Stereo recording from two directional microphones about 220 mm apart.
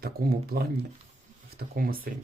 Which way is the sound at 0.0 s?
45° right (ahead or behind).